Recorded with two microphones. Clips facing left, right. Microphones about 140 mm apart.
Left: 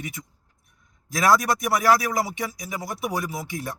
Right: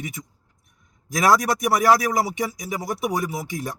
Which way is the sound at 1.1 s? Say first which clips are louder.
Right 1 dB; 20° right (ahead or behind).